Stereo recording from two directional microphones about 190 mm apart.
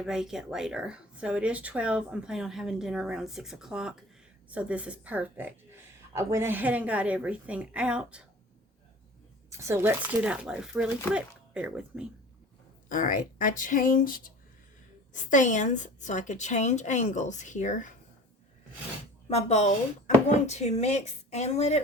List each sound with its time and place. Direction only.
0.0 s speech: centre (ahead or behind)
9.5 s speech: 15° right (ahead or behind)
12.9 s a woman's voice: 45° left (ahead or behind)
19.3 s a woman's voice: 35° left (ahead or behind)